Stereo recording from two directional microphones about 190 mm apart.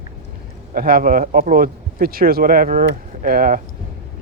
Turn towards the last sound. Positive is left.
turn(degrees=-50)  # may be behind; listen again after turning